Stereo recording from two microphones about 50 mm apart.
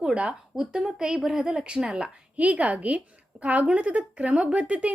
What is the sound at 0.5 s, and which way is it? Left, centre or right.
A woman's voice, centre.